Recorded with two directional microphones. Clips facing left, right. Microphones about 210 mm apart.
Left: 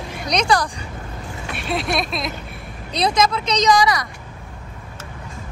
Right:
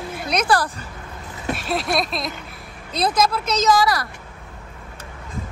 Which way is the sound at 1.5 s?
Centre (ahead or behind).